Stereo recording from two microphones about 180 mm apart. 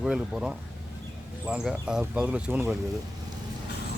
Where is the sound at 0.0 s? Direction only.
5° right (ahead or behind).